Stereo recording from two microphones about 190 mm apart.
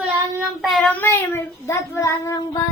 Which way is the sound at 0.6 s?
5° left (ahead or behind).